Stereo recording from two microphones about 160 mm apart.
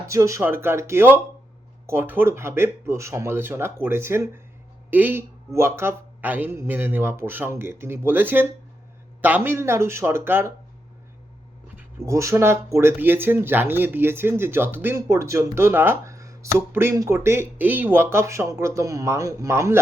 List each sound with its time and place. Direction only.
0.1 s speech: 20° right (ahead or behind)
11.8 s speech: 15° right (ahead or behind)